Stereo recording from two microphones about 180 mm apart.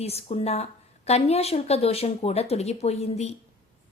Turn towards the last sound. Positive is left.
turn(degrees=35)  # may be behind; listen again after turning